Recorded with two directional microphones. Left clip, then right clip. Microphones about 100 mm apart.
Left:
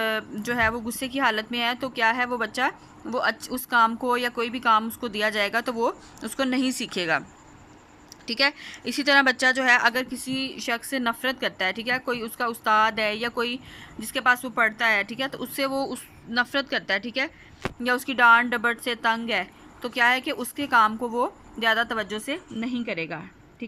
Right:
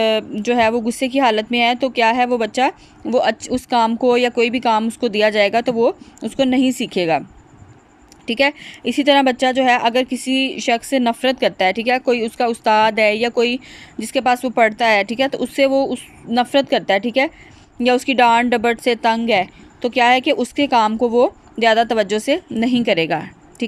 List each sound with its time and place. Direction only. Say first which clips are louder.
0.0 s a woman's voice: right 10 dB; 40° right (ahead or behind)
8.3 s a woman's voice: right 7 dB; 40° right (ahead or behind)
22.3 s a woman's voice: right 13 dB; 90° right